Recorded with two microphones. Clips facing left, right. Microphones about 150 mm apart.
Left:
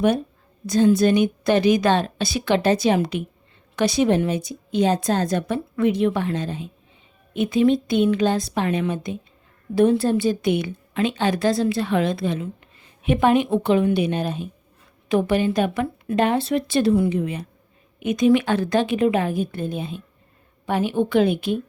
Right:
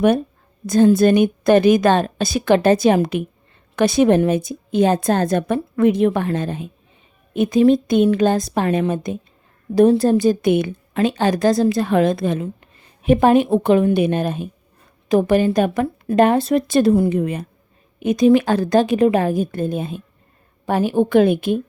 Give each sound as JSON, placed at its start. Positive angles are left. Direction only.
{"t": 0.7, "sound": "a woman's voice", "side_deg": -50}
{"t": 18.0, "sound": "a woman's voice", "side_deg": -35}